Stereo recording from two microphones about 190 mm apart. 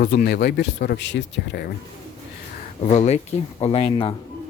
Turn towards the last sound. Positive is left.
turn(degrees=30)  # may be behind; listen again after turning